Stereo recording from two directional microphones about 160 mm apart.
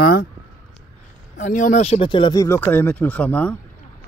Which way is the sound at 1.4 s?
55° left (ahead or behind).